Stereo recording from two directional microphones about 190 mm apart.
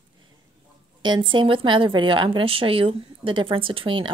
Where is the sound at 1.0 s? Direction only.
25° right (ahead or behind).